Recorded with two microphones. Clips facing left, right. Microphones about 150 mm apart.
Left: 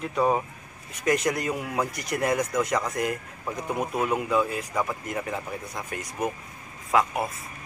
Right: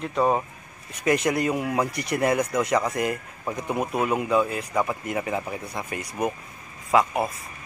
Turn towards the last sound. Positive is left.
turn(degrees=0)  # may be behind; listen again after turning